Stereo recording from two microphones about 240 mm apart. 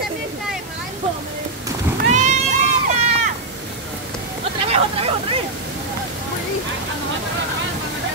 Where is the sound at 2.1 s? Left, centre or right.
Right.